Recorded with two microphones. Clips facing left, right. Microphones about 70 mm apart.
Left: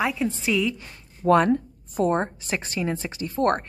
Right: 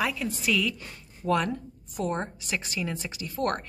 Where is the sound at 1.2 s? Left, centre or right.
Left.